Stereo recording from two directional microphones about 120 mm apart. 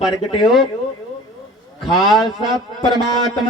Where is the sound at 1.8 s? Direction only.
Centre (ahead or behind).